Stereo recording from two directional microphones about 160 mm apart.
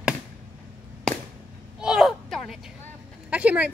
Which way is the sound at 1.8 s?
5° right (ahead or behind).